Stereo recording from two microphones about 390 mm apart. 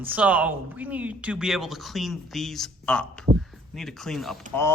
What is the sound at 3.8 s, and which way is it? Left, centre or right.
Speech, centre.